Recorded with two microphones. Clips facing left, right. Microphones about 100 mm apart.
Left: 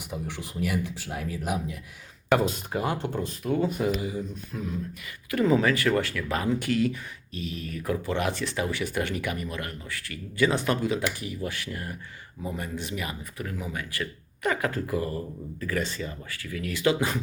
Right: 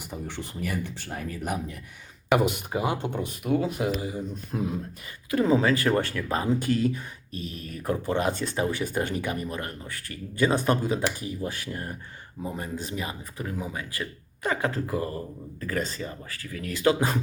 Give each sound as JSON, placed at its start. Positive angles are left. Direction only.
{"t": 0.0, "sound": "speech", "side_deg": 0}
{"t": 2.5, "sound": "speech", "side_deg": -15}
{"t": 4.5, "sound": "speech", "side_deg": -50}
{"t": 5.3, "sound": "speech", "side_deg": -20}
{"t": 5.7, "sound": "speech", "side_deg": -35}